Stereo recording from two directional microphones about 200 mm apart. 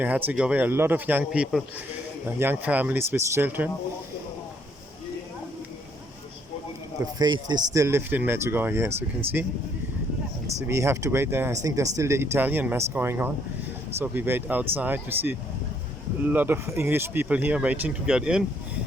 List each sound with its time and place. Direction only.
0.0 s speech: 10° right (ahead or behind)
7.0 s speech: 20° right (ahead or behind)
10.7 s speech: 15° right (ahead or behind)